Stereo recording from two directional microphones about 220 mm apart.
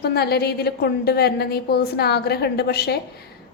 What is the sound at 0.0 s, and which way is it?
A woman's voice, 45° left (ahead or behind).